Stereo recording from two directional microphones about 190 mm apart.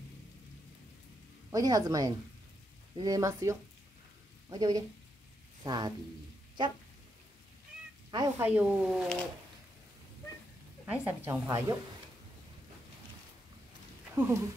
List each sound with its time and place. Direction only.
1.5 s speech: 20° right (ahead or behind)
8.1 s speech: 20° right (ahead or behind)
8.5 s speech: 10° right (ahead or behind)
10.9 s speech: 10° right (ahead or behind)
14.1 s speech: 15° right (ahead or behind)